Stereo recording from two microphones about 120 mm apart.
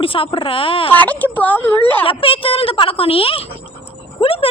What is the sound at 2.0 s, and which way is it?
Speech, 50° left (ahead or behind).